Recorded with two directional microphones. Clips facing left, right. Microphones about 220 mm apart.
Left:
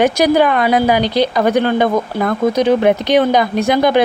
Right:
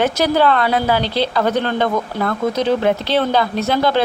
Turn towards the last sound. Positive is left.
turn(degrees=15)  # may be behind; listen again after turning